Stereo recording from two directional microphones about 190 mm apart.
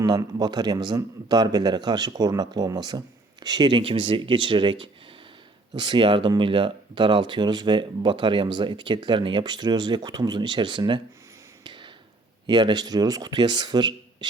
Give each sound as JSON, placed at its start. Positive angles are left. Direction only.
{"t": 0.0, "sound": "speech", "side_deg": -20}
{"t": 11.6, "sound": "tap", "side_deg": -25}
{"t": 12.5, "sound": "speech", "side_deg": -20}